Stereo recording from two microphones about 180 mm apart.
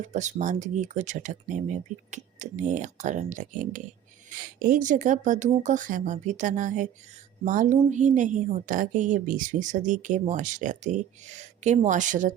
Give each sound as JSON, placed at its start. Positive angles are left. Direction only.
{"t": 0.0, "sound": "a woman's voice", "side_deg": -40}